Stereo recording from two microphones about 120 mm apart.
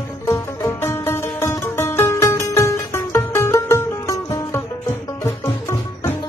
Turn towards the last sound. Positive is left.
turn(degrees=25)  # may be behind; listen again after turning